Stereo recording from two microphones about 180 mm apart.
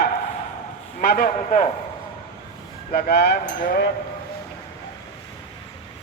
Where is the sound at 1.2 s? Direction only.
40° left (ahead or behind).